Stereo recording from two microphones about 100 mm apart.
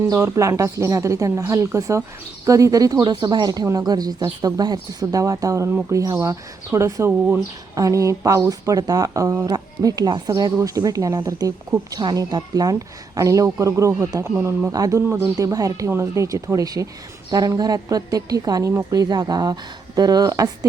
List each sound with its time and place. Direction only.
0.2 s speech: 25° right (ahead or behind)
9.5 s speech: 40° right (ahead or behind)
14.3 s speech: 25° right (ahead or behind)
14.7 s speech: 35° right (ahead or behind)